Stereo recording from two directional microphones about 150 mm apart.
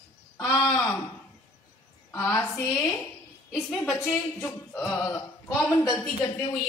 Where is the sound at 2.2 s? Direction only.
15° left (ahead or behind).